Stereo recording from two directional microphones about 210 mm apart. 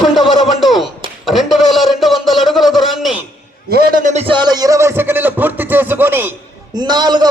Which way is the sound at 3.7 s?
45° right (ahead or behind).